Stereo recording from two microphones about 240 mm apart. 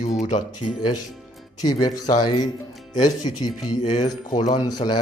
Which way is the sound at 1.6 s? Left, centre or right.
Centre.